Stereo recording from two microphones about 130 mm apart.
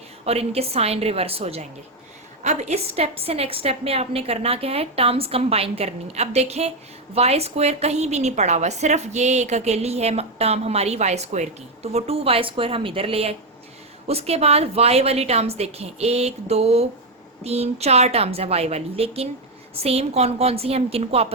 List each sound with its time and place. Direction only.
0.3 s a woman's voice: 50° right (ahead or behind)
2.4 s a woman's voice: 60° right (ahead or behind)